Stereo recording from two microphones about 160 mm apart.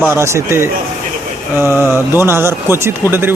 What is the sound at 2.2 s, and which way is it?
Speech, 15° right (ahead or behind).